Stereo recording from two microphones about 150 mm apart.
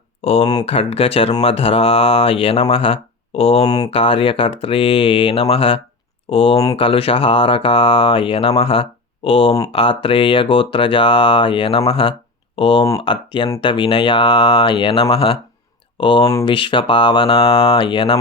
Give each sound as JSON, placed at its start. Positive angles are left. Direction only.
{"t": 0.6, "sound": "speech", "side_deg": 45}